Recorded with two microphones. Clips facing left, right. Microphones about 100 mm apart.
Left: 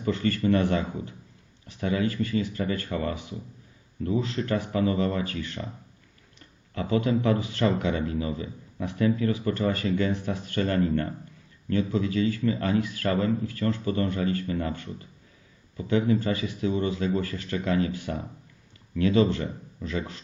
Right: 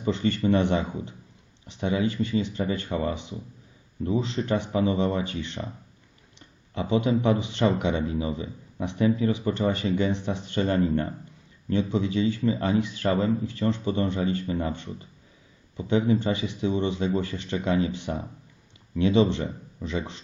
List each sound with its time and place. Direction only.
0.0 s speech: 20° right (ahead or behind)
6.7 s speech: 20° right (ahead or behind)